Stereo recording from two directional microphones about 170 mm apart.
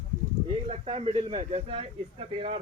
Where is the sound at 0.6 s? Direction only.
40° right (ahead or behind).